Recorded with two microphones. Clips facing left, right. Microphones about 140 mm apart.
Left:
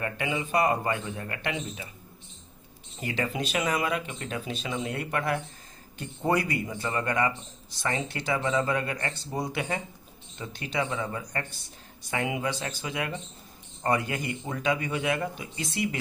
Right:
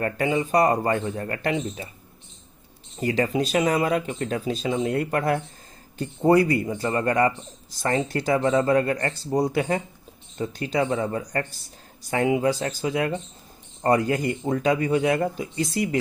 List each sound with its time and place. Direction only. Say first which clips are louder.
0.0 s speech: right 7 dB; 35° right (ahead or behind)
3.0 s speech: right 8 dB; 40° right (ahead or behind)